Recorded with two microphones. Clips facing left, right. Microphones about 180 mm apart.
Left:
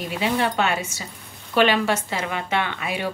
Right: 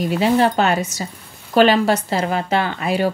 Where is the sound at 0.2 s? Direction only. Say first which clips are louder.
Right 5 dB; 40° right (ahead or behind).